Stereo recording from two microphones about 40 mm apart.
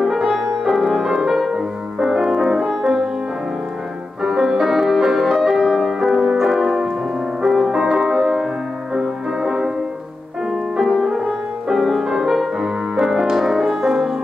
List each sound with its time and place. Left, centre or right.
0.0 s music: centre
4.2 s music: centre